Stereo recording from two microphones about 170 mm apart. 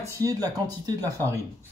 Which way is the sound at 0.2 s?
20° right (ahead or behind).